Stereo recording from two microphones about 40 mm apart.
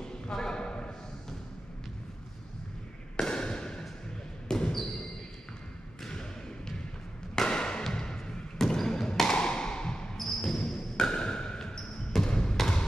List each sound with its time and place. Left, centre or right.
0.0 s a sound: centre
3.2 s fireworks: centre
4.5 s basketball bounce: left
7.3 s a sound: centre
7.8 s music: centre
8.6 s basketball bounce: centre
10.1 s basketball bounce: centre
12.3 s basketball bounce: centre